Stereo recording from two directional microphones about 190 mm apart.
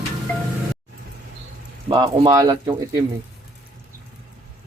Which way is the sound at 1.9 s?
25° right (ahead or behind).